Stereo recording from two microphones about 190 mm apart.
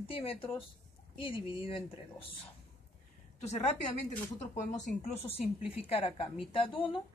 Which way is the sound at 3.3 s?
35° left (ahead or behind).